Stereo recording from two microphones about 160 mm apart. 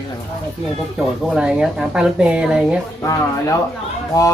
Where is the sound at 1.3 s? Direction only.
5° right (ahead or behind).